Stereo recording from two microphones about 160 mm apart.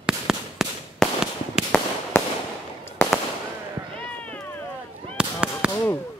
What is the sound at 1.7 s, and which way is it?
Fireworks, 10° left (ahead or behind).